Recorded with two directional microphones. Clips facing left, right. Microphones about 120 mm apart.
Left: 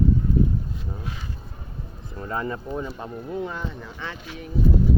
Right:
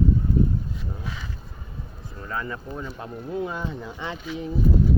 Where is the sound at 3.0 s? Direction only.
Centre (ahead or behind).